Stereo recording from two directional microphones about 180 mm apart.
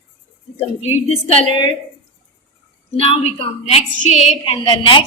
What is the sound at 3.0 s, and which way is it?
A woman's voice, 35° left (ahead or behind).